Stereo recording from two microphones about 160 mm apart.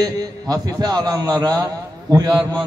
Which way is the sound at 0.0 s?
25° right (ahead or behind).